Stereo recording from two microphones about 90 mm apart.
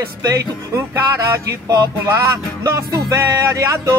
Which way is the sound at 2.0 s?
30° right (ahead or behind).